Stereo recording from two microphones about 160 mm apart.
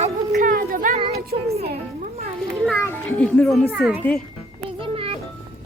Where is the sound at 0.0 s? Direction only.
55° right (ahead or behind).